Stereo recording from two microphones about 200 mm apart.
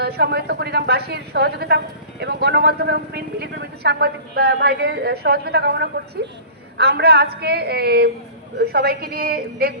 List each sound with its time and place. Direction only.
0.0 s a woman's voice: 55° right (ahead or behind)